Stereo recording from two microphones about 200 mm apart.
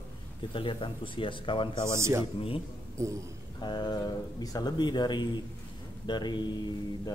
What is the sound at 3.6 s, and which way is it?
Speech, 20° left (ahead or behind).